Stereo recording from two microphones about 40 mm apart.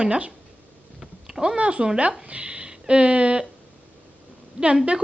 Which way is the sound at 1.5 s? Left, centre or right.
Right.